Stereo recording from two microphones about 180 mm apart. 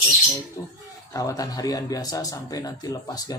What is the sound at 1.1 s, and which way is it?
A man's voice, 20° left (ahead or behind).